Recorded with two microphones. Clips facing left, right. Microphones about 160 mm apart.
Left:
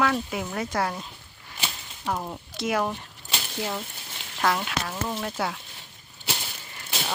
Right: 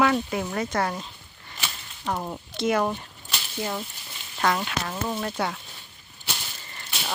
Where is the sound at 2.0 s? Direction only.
Centre (ahead or behind).